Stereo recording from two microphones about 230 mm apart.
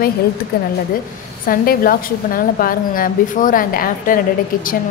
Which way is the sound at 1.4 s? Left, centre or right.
Left.